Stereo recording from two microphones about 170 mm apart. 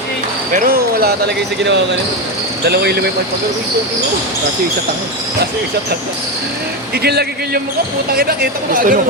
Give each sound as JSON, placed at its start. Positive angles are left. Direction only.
{"t": 0.5, "sound": "speech", "side_deg": -60}
{"t": 2.6, "sound": "a man's voice", "side_deg": -70}
{"t": 6.9, "sound": "a man's voice", "side_deg": -70}